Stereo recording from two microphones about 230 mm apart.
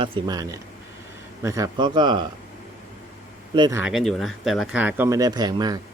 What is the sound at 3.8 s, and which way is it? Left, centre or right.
Speech, centre.